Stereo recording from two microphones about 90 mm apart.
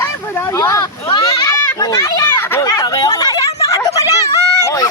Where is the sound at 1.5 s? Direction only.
40° left (ahead or behind).